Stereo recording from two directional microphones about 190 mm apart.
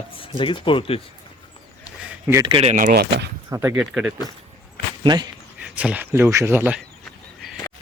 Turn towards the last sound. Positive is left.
turn(degrees=-10)  # may be behind; listen again after turning